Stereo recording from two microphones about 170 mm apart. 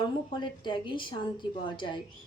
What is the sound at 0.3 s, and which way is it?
Speech, 25° left (ahead or behind).